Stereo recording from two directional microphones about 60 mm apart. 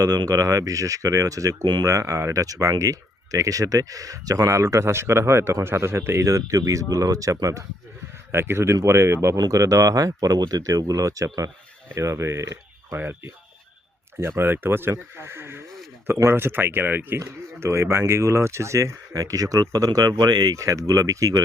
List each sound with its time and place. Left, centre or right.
0.0 s speech: right
8.3 s speech: right
9.5 s speech: right
10.2 s speech: right
11.9 s speech: right
13.0 s speech: right
15.6 s a sound: centre
16.3 s speech: right
17.2 s speech: right